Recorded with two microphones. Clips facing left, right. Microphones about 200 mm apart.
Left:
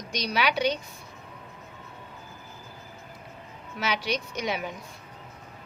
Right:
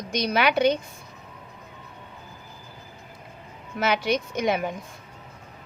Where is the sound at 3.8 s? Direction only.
50° right (ahead or behind).